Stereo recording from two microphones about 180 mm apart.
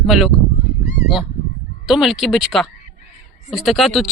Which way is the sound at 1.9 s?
Centre (ahead or behind).